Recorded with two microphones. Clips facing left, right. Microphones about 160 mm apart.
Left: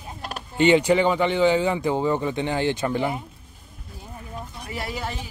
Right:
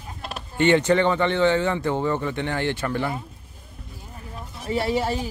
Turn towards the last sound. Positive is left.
turn(degrees=-30)  # may be behind; listen again after turning